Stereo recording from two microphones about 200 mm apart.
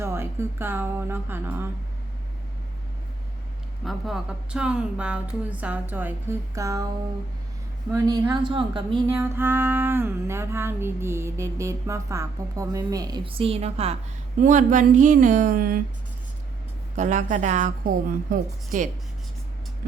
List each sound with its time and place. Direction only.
0.0 s music: 15° right (ahead or behind)
3.8 s music: centre (ahead or behind); by 6.8 s 15° right (ahead or behind)
7.9 s a woman's voice: 20° right (ahead or behind)
9.0 s music: 10° right (ahead or behind); by 13.9 s 30° right (ahead or behind)
14.3 s a woman's voice: 40° right (ahead or behind)
17.0 s a woman's voice: 40° right (ahead or behind)